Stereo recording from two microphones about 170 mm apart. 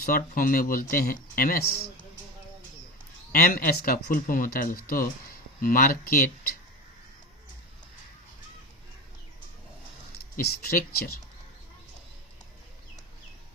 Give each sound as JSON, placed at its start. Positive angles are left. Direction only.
{"t": 0.0, "sound": "speech", "side_deg": 55}
{"t": 3.3, "sound": "speech", "side_deg": 60}
{"t": 10.3, "sound": "speech", "side_deg": 60}